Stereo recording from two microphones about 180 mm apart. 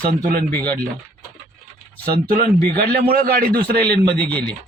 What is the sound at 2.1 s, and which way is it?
Speech, 50° right (ahead or behind).